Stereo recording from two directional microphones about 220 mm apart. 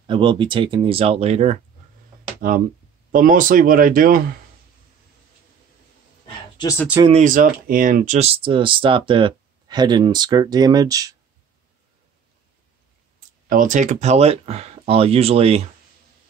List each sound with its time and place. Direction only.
0.0 s speech: 20° right (ahead or behind)
2.4 s speech: 40° right (ahead or behind)
7.0 s speech: 30° right (ahead or behind)
13.5 s speech: 35° right (ahead or behind)